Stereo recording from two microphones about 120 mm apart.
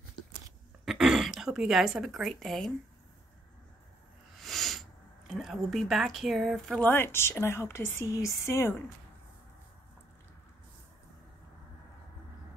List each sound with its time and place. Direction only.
0.8 s a woman's voice: 5° right (ahead or behind)
4.4 s a sound: centre (ahead or behind)
5.3 s speech: 5° right (ahead or behind)
6.9 s speech: 20° left (ahead or behind)